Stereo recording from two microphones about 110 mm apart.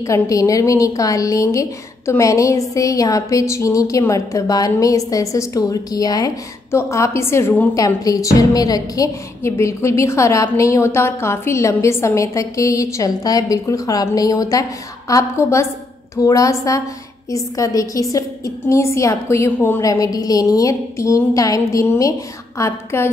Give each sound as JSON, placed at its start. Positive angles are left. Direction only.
{"t": 0.0, "sound": "a woman's voice", "side_deg": 30}
{"t": 7.7, "sound": "a woman's voice", "side_deg": 30}
{"t": 19.8, "sound": "a woman's voice", "side_deg": 30}